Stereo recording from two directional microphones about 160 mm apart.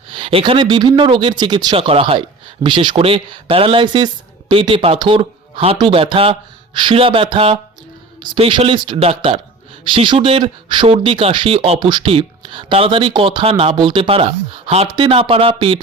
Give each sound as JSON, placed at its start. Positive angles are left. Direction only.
{"t": 0.1, "sound": "speech", "side_deg": -35}